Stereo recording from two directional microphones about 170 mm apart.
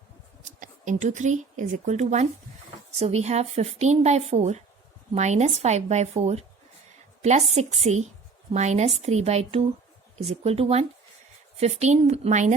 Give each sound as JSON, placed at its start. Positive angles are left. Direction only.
{"t": 0.6, "sound": "speech", "side_deg": -45}